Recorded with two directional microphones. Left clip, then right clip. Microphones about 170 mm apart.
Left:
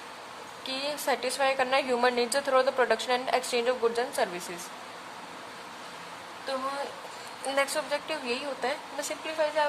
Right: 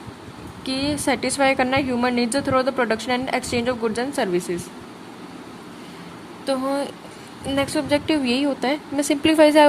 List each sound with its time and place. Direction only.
0.6 s a woman's voice: 15° right (ahead or behind)
1.8 s a woman's voice: 10° right (ahead or behind)
6.5 s speech: 35° right (ahead or behind)
7.5 s speech: 20° right (ahead or behind)
9.2 s speech: 45° right (ahead or behind)